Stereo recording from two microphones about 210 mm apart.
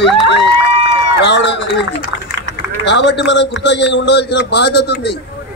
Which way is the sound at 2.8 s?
55° left (ahead or behind).